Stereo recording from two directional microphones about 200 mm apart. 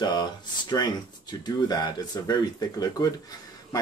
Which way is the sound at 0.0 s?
20° left (ahead or behind).